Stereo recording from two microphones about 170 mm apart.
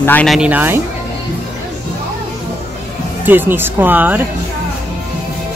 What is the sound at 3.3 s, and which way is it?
Speech, 10° right (ahead or behind).